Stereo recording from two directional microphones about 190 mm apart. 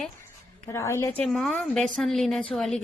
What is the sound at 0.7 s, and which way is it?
A woman's voice, 15° left (ahead or behind).